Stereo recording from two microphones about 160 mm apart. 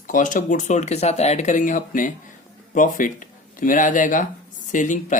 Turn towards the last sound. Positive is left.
turn(degrees=55)  # may be behind; listen again after turning